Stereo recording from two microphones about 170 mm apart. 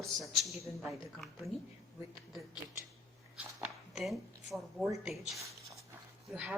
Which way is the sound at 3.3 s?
5° right (ahead or behind).